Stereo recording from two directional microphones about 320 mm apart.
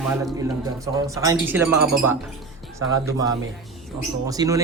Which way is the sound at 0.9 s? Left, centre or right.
Centre.